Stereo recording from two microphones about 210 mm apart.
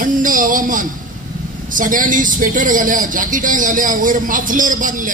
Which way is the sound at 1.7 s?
40° right (ahead or behind).